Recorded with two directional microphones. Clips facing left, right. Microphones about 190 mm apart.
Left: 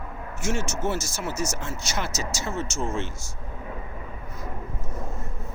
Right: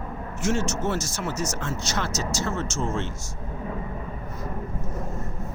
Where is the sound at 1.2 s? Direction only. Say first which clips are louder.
Right 1 dB; 10° left (ahead or behind).